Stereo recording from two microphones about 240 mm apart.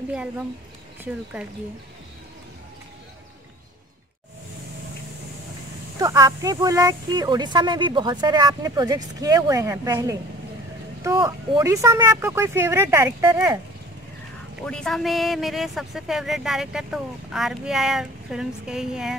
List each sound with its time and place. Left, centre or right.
0.1 s speech: centre
5.9 s speech: centre
14.6 s speech: centre